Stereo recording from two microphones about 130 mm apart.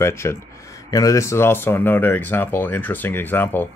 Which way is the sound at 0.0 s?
20° left (ahead or behind).